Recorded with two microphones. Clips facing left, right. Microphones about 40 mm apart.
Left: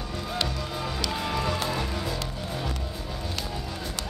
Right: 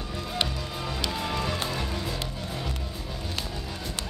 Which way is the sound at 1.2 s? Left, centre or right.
Centre.